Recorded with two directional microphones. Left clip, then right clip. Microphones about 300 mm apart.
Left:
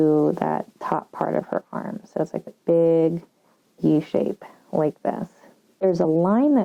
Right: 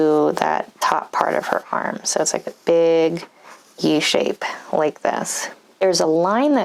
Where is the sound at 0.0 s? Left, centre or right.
Centre.